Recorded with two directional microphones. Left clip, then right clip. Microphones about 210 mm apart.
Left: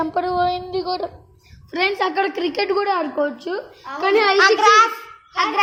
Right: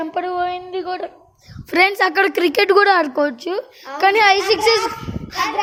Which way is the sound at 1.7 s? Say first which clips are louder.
Right 5 dB; 45° right (ahead or behind).